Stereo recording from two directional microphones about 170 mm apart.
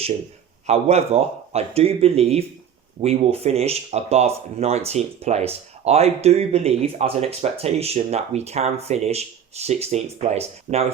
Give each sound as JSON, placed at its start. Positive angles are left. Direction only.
{"t": 0.7, "sound": "speech", "side_deg": -40}